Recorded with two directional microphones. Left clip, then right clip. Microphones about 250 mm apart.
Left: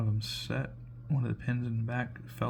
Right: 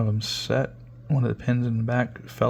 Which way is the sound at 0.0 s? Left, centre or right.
Right.